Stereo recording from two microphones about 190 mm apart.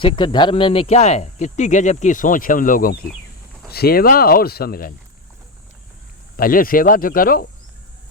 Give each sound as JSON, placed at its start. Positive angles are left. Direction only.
{"t": 0.0, "sound": "speech", "side_deg": 25}
{"t": 6.3, "sound": "speech", "side_deg": 50}